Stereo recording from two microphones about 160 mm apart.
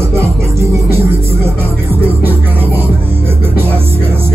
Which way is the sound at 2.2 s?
15° right (ahead or behind).